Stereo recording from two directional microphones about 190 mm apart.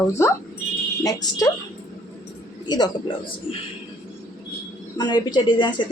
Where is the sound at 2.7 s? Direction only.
20° left (ahead or behind).